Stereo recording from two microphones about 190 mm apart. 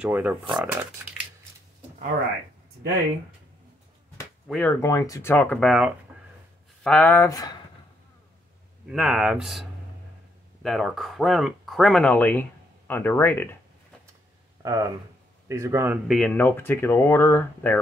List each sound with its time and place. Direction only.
0.0 s speech: 10° right (ahead or behind)
4.5 s speech: 10° left (ahead or behind)
8.8 s speech: 5° right (ahead or behind)
14.6 s speech: 15° right (ahead or behind)
16.1 s speech: 5° left (ahead or behind)